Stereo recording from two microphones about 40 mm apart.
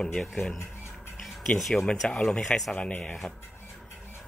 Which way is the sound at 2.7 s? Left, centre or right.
Left.